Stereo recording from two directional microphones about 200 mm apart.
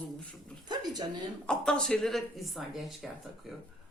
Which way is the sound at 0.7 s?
20° right (ahead or behind).